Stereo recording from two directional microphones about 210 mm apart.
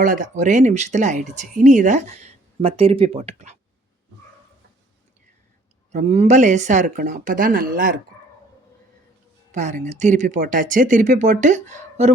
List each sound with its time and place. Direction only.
0.0 s speech: 40° right (ahead or behind)
5.9 s speech: 30° right (ahead or behind)
9.5 s speech: 35° right (ahead or behind)